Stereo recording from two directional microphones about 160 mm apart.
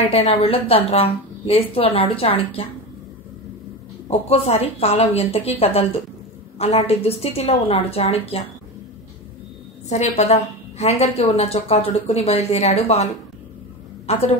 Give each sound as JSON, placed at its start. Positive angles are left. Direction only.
{"t": 0.1, "sound": "a woman's voice", "side_deg": 40}
{"t": 4.3, "sound": "a woman's voice", "side_deg": 40}
{"t": 9.8, "sound": "a woman's voice", "side_deg": 45}